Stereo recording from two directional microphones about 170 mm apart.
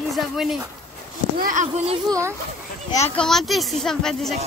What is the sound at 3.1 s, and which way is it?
Speech, centre (ahead or behind).